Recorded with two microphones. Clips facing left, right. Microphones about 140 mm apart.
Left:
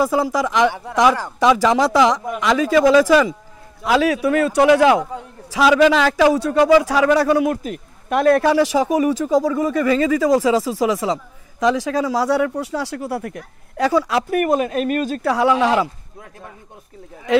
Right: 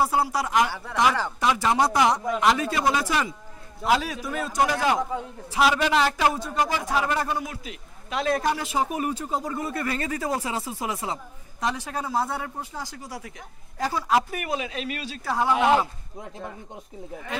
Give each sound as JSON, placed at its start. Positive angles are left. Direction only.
{"t": 0.0, "sound": "speech", "side_deg": 90}
{"t": 0.7, "sound": "speech", "side_deg": 20}
{"t": 1.4, "sound": "speech", "side_deg": 90}
{"t": 5.5, "sound": "speech", "side_deg": 90}
{"t": 7.5, "sound": "speech", "side_deg": 50}
{"t": 14.4, "sound": "speech", "side_deg": 50}
{"t": 15.2, "sound": "speech", "side_deg": 85}